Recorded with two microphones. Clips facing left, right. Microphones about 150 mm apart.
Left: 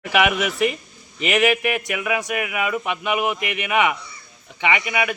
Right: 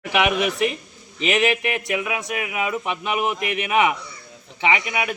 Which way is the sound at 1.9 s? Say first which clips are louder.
Left 1 dB; 25° right (ahead or behind).